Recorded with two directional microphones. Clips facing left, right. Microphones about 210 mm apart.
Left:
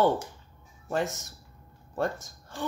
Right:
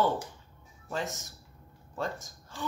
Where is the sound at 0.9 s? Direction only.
60° left (ahead or behind).